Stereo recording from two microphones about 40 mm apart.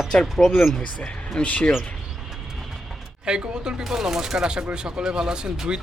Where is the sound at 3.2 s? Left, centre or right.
Right.